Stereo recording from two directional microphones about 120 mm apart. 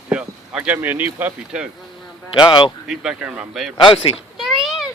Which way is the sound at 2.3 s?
40° left (ahead or behind).